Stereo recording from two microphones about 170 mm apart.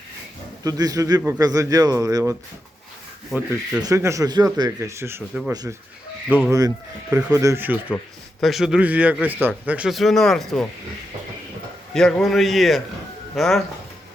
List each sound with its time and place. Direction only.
0.6 s a man's voice: 20° right (ahead or behind)
3.3 s speech: 10° right (ahead or behind)
6.2 s speech: 5° right (ahead or behind)
6.5 s speech: 20° right (ahead or behind)
7.9 s a man's voice: 5° left (ahead or behind)
11.9 s a man's voice: 5° left (ahead or behind)